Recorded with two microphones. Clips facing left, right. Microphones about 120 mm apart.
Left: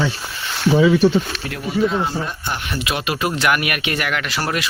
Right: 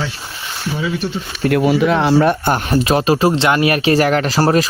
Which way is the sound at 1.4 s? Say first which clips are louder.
Right 7 dB; 65° right (ahead or behind).